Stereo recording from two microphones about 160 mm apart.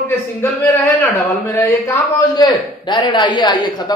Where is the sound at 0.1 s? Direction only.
15° left (ahead or behind).